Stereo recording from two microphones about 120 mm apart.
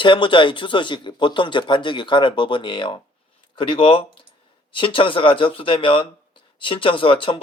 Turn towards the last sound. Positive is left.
turn(degrees=45)  # may be behind; listen again after turning